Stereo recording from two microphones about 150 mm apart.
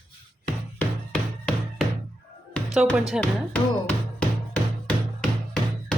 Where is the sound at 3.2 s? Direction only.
10° left (ahead or behind).